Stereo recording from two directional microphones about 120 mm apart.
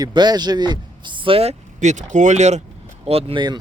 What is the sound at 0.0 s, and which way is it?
A man's voice, 35° right (ahead or behind).